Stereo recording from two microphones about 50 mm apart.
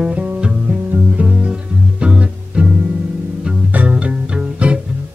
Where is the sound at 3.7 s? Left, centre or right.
Right.